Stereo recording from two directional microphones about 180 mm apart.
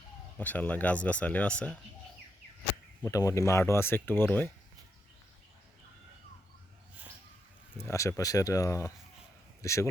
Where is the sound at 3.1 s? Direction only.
20° left (ahead or behind).